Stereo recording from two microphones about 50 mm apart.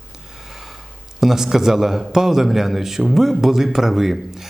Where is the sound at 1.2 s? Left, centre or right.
Centre.